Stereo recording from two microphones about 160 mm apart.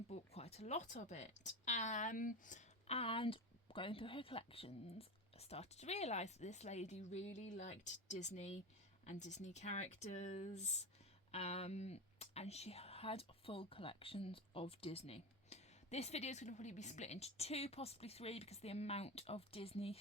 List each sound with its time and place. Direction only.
0.1 s speech: 40° left (ahead or behind)